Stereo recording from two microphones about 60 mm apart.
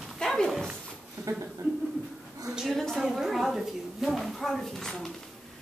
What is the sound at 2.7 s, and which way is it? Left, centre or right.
A woman's voice, centre.